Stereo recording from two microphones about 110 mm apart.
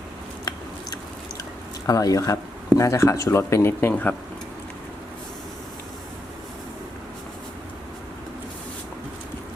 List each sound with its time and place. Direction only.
1.9 s speech: 30° left (ahead or behind)